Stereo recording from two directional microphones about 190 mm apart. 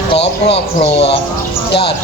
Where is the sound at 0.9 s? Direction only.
60° left (ahead or behind).